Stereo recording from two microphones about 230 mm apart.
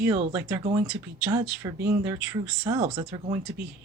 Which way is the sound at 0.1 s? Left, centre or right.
Centre.